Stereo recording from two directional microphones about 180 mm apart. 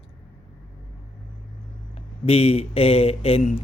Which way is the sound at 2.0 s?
35° left (ahead or behind).